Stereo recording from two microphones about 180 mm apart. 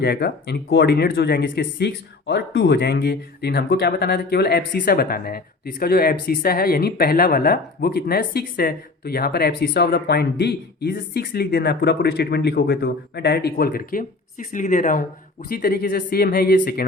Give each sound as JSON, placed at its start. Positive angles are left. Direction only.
{"t": 0.0, "sound": "speech", "side_deg": 60}